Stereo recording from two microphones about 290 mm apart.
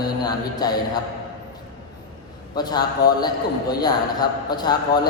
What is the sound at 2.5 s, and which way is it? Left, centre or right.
A man's voice, centre.